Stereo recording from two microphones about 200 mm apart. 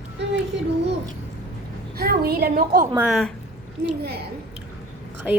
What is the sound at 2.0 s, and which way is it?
Speech, 50° right (ahead or behind).